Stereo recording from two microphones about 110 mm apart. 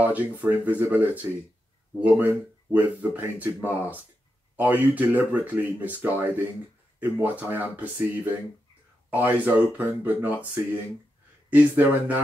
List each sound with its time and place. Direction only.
0.0 s speech: 15° right (ahead or behind)
11.5 s speech: 15° right (ahead or behind)